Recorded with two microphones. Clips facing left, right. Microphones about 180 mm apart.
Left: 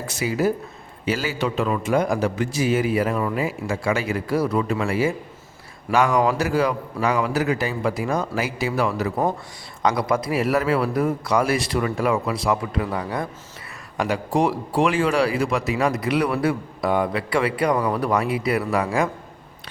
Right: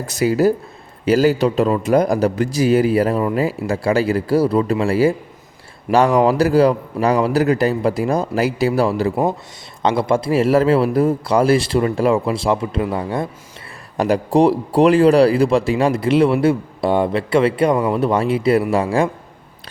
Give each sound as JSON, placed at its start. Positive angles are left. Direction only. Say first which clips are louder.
{"t": 0.1, "sound": "a man's voice", "louder": "right 7 dB", "side_deg": -40}